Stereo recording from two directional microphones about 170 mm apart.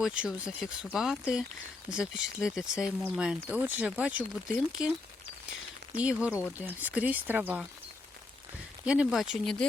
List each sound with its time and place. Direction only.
0.0 s speech: 5° right (ahead or behind)
6.0 s speech: 5° right (ahead or behind)
8.8 s speech: 5° right (ahead or behind)